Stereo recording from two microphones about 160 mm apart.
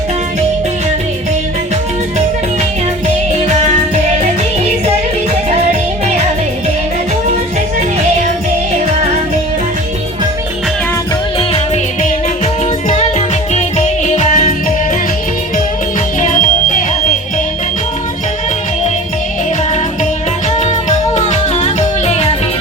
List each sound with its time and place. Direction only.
11.3 s music: 35° left (ahead or behind)
12.9 s music: 45° left (ahead or behind)
16.2 s music: 55° left (ahead or behind)
21.2 s music: 45° left (ahead or behind)